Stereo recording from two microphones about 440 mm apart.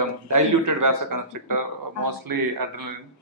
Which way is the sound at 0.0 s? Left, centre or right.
Right.